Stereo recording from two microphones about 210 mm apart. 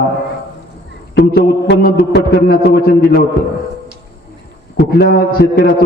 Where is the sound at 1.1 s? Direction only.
50° left (ahead or behind).